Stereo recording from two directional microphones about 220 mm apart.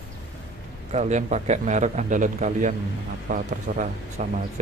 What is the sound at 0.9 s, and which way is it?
A man's voice, 35° right (ahead or behind).